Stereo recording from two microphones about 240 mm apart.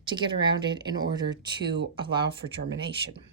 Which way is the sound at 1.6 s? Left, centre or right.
Right.